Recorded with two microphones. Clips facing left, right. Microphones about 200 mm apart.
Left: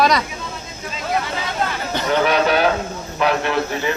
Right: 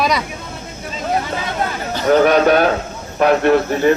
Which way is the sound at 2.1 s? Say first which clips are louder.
Right 6 dB; 45° right (ahead or behind).